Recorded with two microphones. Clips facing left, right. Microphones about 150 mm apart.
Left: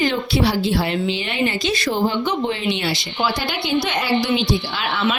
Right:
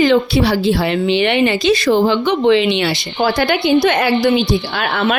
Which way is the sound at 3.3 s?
60° right (ahead or behind).